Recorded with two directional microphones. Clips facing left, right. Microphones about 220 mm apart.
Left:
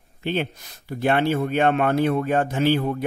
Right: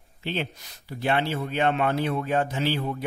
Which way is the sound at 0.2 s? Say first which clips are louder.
Left 5 dB; 50° left (ahead or behind).